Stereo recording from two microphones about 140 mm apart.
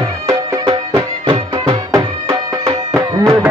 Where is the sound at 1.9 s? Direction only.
20° right (ahead or behind).